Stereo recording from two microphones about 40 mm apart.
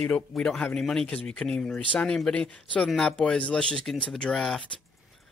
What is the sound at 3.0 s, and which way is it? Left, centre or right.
Speech, centre.